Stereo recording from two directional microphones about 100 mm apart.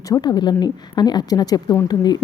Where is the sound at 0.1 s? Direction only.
45° left (ahead or behind).